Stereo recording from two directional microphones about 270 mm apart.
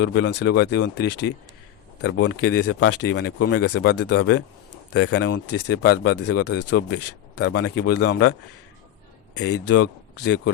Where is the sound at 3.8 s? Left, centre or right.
Left.